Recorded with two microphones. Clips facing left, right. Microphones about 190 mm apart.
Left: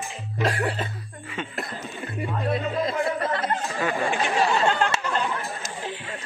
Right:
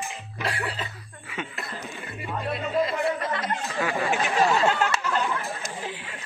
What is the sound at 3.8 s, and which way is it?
Chatter, 10° right (ahead or behind).